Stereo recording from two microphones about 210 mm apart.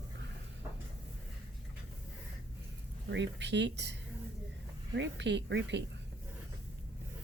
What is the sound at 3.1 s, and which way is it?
Speech, 60° right (ahead or behind).